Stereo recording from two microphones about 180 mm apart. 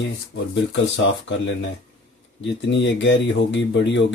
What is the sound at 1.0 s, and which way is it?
Speech, 90° left.